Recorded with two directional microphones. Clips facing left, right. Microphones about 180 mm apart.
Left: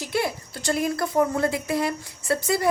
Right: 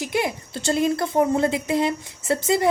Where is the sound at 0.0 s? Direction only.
15° right (ahead or behind).